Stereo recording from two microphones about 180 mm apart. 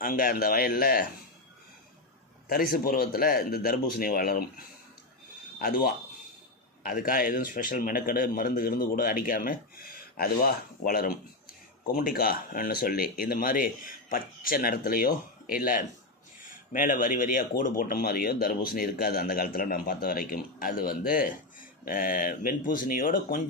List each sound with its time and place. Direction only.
0.0 s speech: 50° left (ahead or behind)
2.5 s speech: 55° left (ahead or behind)